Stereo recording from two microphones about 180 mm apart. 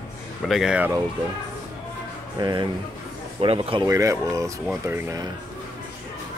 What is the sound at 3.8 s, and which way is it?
Speech, 15° right (ahead or behind).